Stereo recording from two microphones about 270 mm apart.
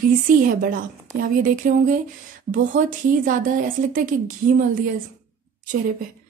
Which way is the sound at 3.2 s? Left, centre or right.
Right.